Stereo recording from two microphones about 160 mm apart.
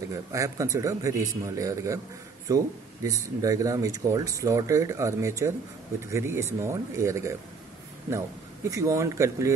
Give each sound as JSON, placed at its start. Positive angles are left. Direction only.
{"t": 0.1, "sound": "speech", "side_deg": -20}
{"t": 8.6, "sound": "speech", "side_deg": -20}